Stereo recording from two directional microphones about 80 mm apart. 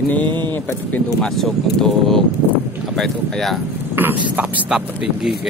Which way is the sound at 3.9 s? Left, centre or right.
Right.